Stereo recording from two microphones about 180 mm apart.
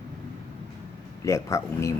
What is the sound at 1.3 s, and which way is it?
Speech, 15° left (ahead or behind).